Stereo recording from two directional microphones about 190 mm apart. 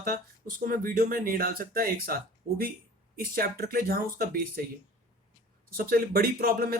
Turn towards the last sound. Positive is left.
turn(degrees=-50)  # may be behind; listen again after turning